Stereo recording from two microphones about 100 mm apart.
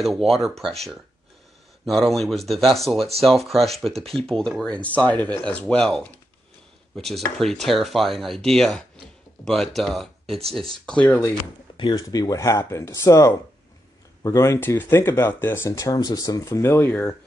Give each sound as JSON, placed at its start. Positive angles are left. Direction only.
{"t": 0.0, "sound": "speech", "side_deg": 0}
{"t": 1.9, "sound": "speech", "side_deg": 0}
{"t": 4.7, "sound": "speech", "side_deg": 15}
{"t": 11.9, "sound": "speech", "side_deg": 40}